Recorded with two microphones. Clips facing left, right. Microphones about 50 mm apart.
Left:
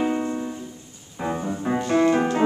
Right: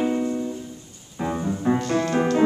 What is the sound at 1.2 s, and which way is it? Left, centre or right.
Music, centre.